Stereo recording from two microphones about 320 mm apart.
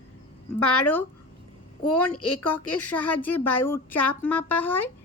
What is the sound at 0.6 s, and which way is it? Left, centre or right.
Speech, left.